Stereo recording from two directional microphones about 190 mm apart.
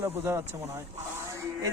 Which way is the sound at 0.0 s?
10° right (ahead or behind).